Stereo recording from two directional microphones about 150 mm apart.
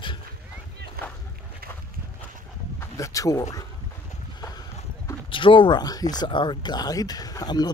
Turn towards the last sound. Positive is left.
turn(degrees=25)  # may be behind; listen again after turning